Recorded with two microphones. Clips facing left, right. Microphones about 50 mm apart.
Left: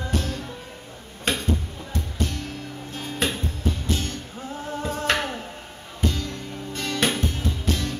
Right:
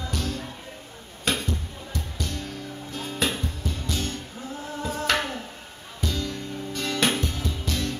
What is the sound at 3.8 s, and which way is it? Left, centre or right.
Music, left.